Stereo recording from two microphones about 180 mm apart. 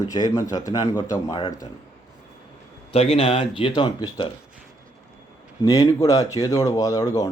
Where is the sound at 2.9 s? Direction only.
35° left (ahead or behind).